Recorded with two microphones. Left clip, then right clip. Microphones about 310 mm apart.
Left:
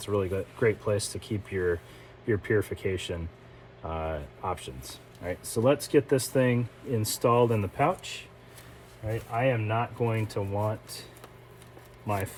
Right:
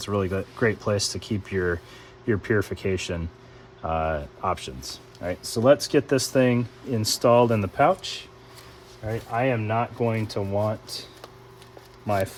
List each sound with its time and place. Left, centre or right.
0.0 s speech: right
9.3 s speech: right
12.0 s speech: right